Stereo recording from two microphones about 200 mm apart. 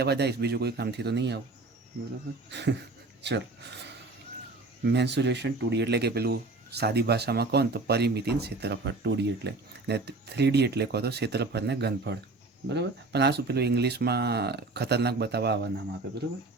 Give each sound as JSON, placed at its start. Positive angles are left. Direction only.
{"t": 0.0, "sound": "speech", "side_deg": -55}
{"t": 2.5, "sound": "speech", "side_deg": -60}
{"t": 4.9, "sound": "speech", "side_deg": -60}